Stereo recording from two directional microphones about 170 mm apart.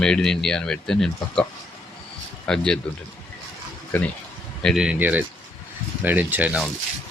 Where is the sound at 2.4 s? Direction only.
5° left (ahead or behind).